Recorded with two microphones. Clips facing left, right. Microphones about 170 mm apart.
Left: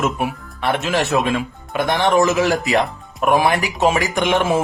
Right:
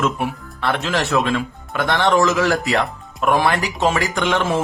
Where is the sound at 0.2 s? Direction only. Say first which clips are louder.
Left 1 dB; 15° left (ahead or behind).